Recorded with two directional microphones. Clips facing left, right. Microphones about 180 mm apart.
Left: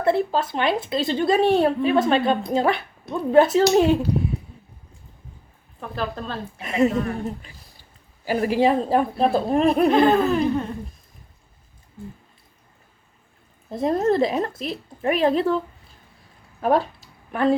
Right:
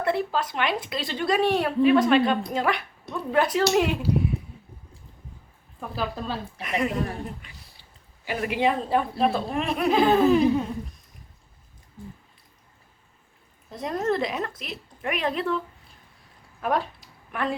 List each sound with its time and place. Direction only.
0.0 s speech: 25° left (ahead or behind)
5.8 s speech: 5° right (ahead or behind)
6.6 s speech: 25° left (ahead or behind)
7.3 s a woman's voice: 40° left (ahead or behind)
9.9 s speech: centre (ahead or behind)
13.7 s a woman's voice: 30° left (ahead or behind)